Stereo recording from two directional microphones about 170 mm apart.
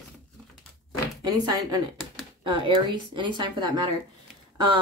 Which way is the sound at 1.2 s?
25° right (ahead or behind).